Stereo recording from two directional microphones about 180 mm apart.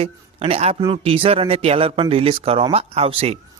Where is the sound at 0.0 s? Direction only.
35° right (ahead or behind).